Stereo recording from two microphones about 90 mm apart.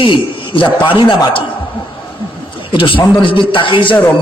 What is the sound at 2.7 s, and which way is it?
A man's voice, 70° left (ahead or behind).